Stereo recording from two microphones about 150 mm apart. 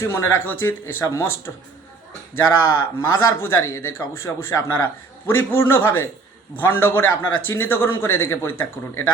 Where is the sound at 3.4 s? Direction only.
20° left (ahead or behind).